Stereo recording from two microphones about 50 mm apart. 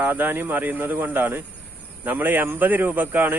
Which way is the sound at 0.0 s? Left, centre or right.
Right.